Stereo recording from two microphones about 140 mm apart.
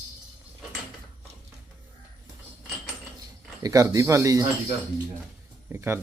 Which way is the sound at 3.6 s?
25° right (ahead or behind).